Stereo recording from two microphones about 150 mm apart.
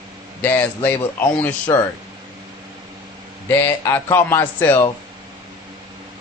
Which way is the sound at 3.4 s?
15° left (ahead or behind).